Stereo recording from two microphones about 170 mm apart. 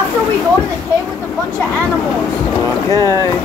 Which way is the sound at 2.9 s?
20° left (ahead or behind).